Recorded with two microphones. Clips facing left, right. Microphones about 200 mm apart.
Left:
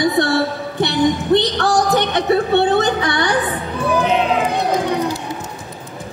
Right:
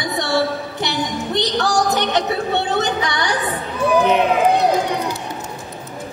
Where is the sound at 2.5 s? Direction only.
55° left (ahead or behind).